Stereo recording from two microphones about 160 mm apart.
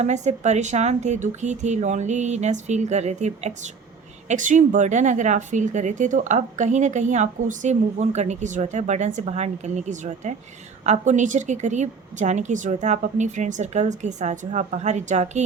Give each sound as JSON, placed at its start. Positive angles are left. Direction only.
{"t": 0.0, "sound": "speech", "side_deg": -45}